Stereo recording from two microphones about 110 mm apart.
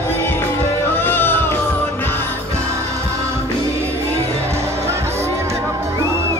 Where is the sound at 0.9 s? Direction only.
20° left (ahead or behind).